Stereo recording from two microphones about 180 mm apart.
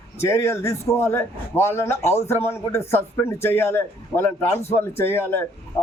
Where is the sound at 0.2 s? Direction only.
15° left (ahead or behind).